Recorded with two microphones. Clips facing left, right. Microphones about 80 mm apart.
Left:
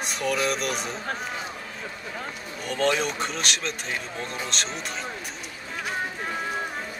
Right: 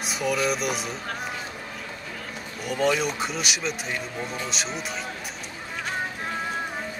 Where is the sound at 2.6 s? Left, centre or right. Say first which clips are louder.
Right 1 dB; centre.